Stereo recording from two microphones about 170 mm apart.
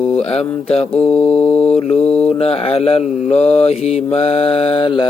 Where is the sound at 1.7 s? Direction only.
40° left (ahead or behind).